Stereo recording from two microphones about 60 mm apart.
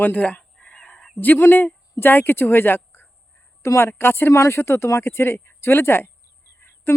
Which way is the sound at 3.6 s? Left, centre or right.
Left.